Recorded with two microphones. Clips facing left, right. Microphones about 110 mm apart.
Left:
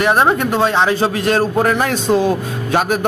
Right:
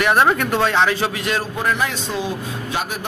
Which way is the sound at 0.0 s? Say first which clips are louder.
Left 2 dB; 25° left (ahead or behind).